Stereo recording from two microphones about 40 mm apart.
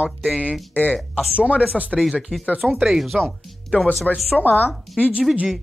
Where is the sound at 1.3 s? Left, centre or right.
Right.